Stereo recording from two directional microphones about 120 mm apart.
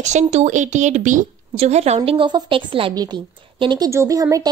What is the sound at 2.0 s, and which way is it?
Speech, 45° right (ahead or behind).